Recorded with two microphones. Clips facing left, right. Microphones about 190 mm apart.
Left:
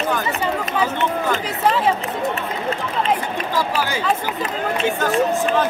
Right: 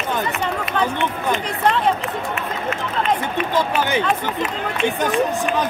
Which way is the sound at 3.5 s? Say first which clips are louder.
Right 2 dB; 20° right (ahead or behind).